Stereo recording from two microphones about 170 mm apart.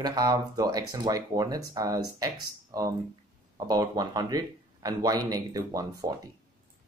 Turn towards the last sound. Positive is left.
turn(degrees=-20)  # may be behind; listen again after turning